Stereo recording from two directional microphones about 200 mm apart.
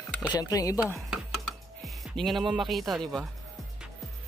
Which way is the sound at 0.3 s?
20° left (ahead or behind).